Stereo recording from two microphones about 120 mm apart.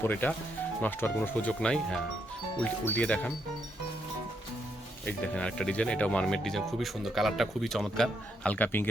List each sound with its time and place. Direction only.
0.0 s speech: 15° left (ahead or behind)
5.0 s speech: 10° left (ahead or behind)
8.5 s speech: 15° left (ahead or behind)